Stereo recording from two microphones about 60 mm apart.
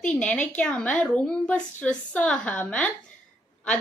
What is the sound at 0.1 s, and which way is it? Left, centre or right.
A woman's voice, centre.